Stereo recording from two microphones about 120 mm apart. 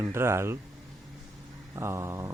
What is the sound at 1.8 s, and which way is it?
Speech, 25° right (ahead or behind).